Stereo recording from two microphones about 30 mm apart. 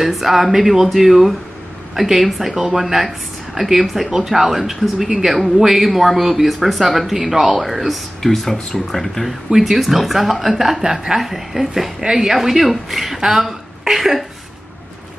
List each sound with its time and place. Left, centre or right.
0.0 s a woman's voice: centre
8.2 s speech: centre
9.5 s a woman's voice: centre
12.0 s speech: centre
12.4 s a woman's voice: centre